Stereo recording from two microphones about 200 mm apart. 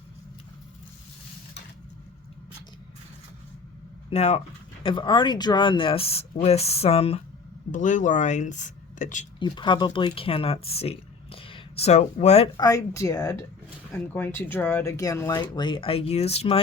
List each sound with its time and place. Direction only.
4.1 s speech: 30° left (ahead or behind)
9.4 s speech: 25° left (ahead or behind)
10.7 s a sound: 30° left (ahead or behind)
12.5 s speech: 15° left (ahead or behind)